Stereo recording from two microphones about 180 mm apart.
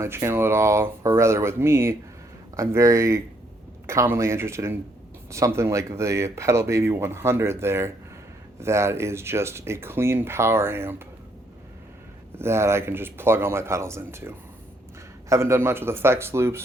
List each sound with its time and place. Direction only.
0.0 s speech: 15° right (ahead or behind)
12.4 s speech: 15° right (ahead or behind)